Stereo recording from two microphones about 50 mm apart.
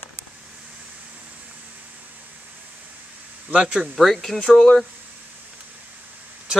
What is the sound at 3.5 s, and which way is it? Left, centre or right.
Speech, centre.